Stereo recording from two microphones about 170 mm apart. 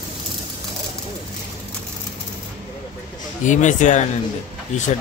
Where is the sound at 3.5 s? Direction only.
45° left (ahead or behind).